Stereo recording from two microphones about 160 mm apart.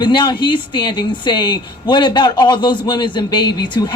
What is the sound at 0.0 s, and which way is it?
Speech, 30° left (ahead or behind).